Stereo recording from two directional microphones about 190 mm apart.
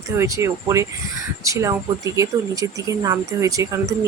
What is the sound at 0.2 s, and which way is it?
Speech, 15° right (ahead or behind).